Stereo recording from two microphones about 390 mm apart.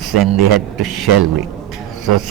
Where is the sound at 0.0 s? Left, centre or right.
Right.